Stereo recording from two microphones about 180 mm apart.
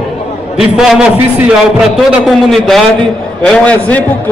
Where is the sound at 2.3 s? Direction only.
Centre (ahead or behind).